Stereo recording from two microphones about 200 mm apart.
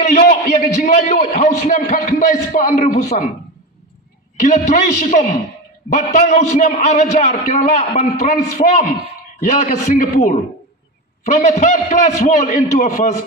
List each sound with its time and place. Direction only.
0.0 s a man's voice: 50° left (ahead or behind)
4.4 s a man's voice: 40° left (ahead or behind)